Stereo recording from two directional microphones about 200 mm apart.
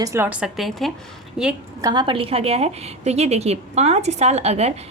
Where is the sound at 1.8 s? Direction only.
20° right (ahead or behind).